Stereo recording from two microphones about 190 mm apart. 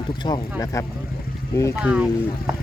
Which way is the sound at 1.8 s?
5° right (ahead or behind).